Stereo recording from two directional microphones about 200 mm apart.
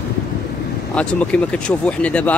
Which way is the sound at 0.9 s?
5° left (ahead or behind).